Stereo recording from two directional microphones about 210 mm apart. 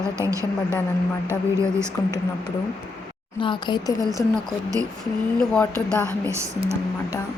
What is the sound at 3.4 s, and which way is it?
Speech, 25° left (ahead or behind).